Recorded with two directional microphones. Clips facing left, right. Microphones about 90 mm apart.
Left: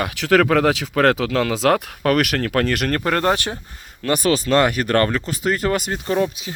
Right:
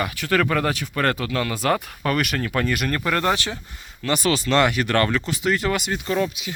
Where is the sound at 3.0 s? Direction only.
40° left (ahead or behind).